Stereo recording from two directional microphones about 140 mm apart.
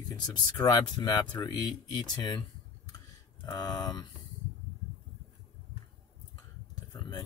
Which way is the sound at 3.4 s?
30° left (ahead or behind).